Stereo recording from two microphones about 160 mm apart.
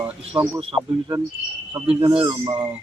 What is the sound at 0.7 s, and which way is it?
Speech, 20° right (ahead or behind).